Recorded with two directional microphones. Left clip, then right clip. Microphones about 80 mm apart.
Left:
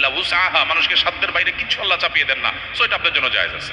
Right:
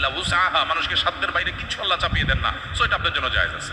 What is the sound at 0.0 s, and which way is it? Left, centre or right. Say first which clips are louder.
Speech: left 4 dB; centre.